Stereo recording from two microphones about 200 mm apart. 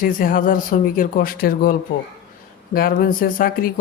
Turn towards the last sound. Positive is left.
turn(degrees=45)  # may be behind; listen again after turning